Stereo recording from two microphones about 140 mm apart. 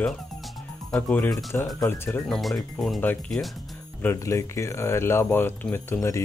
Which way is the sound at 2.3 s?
Centre (ahead or behind).